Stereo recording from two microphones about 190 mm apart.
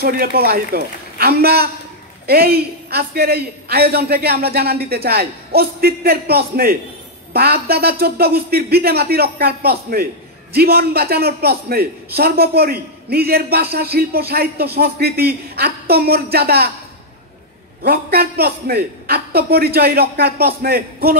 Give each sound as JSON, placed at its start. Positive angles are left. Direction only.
{"t": 0.0, "sound": "a man's voice", "side_deg": -55}
{"t": 17.8, "sound": "a man's voice", "side_deg": -55}